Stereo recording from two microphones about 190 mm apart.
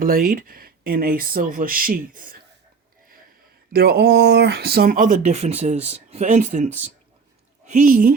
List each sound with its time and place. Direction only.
0.0 s speech: 50° right (ahead or behind)
3.7 s speech: 55° right (ahead or behind)